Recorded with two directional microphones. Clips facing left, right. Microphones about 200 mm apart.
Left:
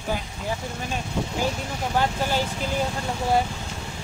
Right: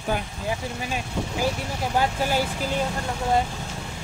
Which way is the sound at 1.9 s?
10° right (ahead or behind).